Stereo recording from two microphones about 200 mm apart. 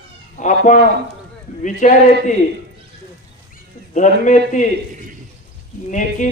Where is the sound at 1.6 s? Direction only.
40° left (ahead or behind).